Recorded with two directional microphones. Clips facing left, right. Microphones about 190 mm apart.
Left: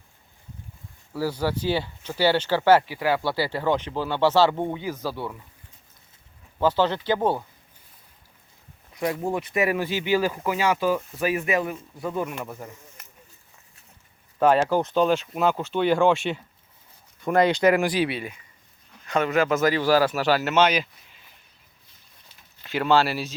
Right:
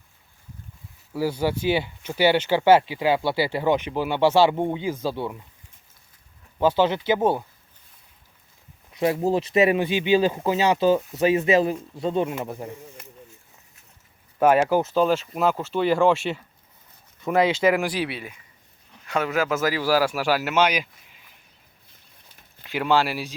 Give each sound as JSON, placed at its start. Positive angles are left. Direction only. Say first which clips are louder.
{"t": 1.1, "sound": "speech", "louder": "right 2 dB", "side_deg": -20}
{"t": 6.6, "sound": "speech", "louder": "right 2 dB", "side_deg": -15}
{"t": 9.0, "sound": "speech", "louder": "right 5 dB", "side_deg": -25}
{"t": 14.3, "sound": "speech", "louder": "right 1 dB", "side_deg": -10}
{"t": 22.6, "sound": "speech", "louder": "left 1 dB", "side_deg": -15}